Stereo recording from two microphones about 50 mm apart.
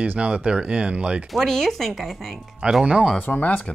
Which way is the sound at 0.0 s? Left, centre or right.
Right.